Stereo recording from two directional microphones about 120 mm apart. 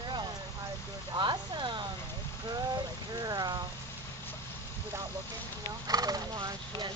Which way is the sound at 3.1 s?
35° right (ahead or behind).